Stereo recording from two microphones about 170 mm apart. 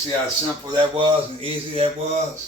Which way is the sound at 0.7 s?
30° right (ahead or behind).